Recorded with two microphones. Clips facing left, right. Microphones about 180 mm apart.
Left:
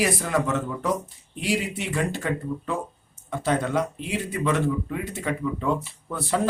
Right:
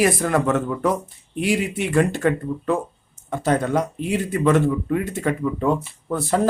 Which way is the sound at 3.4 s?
45° right (ahead or behind).